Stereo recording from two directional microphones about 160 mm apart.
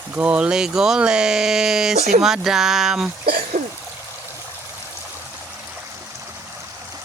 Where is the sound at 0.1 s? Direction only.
10° right (ahead or behind).